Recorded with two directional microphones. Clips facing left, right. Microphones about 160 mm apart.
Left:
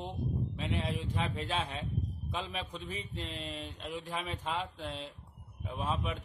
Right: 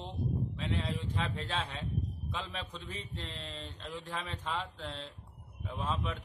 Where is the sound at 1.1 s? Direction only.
10° left (ahead or behind).